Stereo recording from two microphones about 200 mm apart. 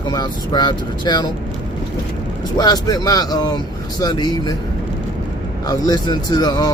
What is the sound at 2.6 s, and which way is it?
Speech, 20° left (ahead or behind).